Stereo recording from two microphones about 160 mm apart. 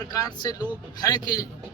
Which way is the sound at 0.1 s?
25° left (ahead or behind).